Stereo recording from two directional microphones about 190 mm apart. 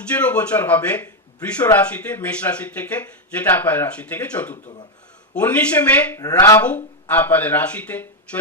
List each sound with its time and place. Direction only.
0.1 s speech: 5° left (ahead or behind)
4.5 s speech: 30° left (ahead or behind)
5.4 s speech: 5° left (ahead or behind)